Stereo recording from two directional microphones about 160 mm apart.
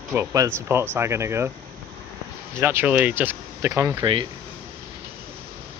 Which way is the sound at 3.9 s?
30° right (ahead or behind).